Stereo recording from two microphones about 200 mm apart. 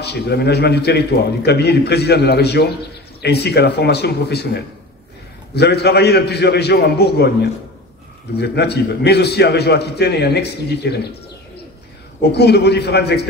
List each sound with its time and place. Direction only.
0.0 s a man's voice: 55° left (ahead or behind)
5.5 s a man's voice: 55° left (ahead or behind)
8.4 s a man's voice: 55° left (ahead or behind)
12.2 s a man's voice: 55° left (ahead or behind)